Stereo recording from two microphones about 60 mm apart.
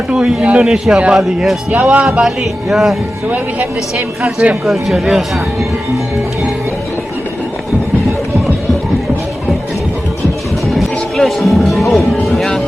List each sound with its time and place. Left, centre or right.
0.1 s a man's voice: centre
1.7 s speech: right
2.2 s speech: centre
3.2 s speech: right
3.9 s a man's voice: centre
10.8 s music: centre